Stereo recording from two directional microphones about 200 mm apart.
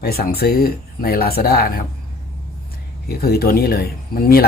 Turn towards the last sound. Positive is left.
turn(degrees=50)  # may be behind; listen again after turning